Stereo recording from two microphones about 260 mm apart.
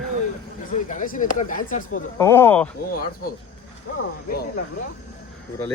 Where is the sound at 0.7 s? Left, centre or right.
Left.